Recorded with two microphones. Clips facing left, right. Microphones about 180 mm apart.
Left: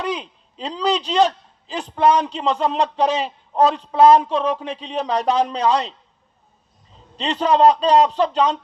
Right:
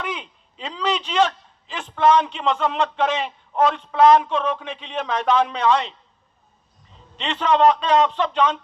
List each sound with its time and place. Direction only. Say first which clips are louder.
0.0 s a man's voice: left 5 dB; 35° left (ahead or behind)
7.2 s a man's voice: left 2 dB; 35° left (ahead or behind)